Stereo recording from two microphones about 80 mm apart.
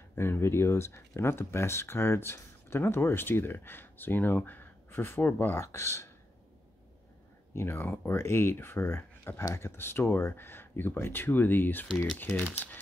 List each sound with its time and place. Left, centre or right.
0.1 s speech: left
7.5 s speech: left